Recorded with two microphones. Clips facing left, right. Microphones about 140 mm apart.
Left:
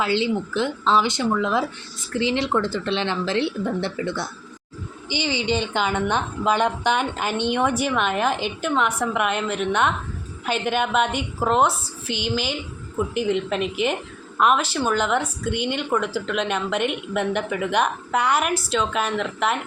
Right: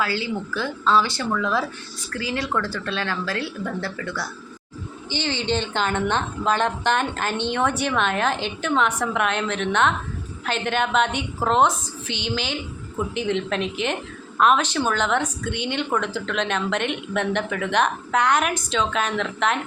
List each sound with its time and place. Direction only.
0.0 s a woman's voice: 20° left (ahead or behind)
5.0 s a woman's voice: 10° left (ahead or behind)